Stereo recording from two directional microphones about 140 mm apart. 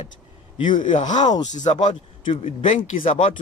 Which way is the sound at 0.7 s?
65° left (ahead or behind).